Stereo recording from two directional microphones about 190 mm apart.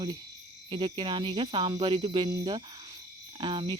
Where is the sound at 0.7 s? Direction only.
25° right (ahead or behind).